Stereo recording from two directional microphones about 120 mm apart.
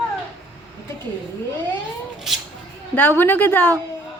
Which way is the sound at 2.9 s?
15° left (ahead or behind).